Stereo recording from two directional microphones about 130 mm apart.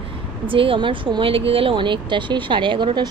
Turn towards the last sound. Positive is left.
turn(degrees=-35)  # may be behind; listen again after turning